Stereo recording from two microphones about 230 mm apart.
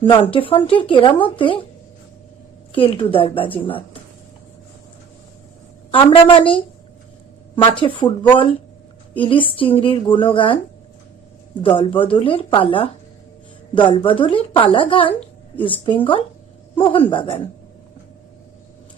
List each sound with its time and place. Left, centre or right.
0.0 s speech: left
2.7 s speech: left
5.9 s speech: left
11.6 s speech: left
16.7 s speech: left